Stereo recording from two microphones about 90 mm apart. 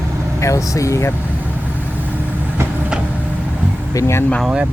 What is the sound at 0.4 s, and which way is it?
Speech, 35° left (ahead or behind).